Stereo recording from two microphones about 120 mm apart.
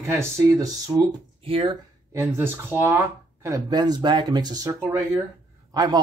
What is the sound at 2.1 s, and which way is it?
Speech, 20° right (ahead or behind).